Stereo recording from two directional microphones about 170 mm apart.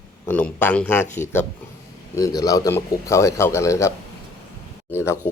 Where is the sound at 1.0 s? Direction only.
45° left (ahead or behind).